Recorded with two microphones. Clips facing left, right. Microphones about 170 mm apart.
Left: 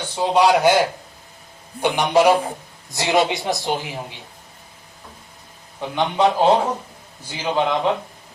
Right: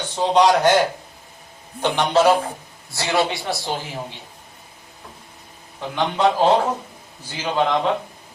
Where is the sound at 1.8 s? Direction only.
10° left (ahead or behind).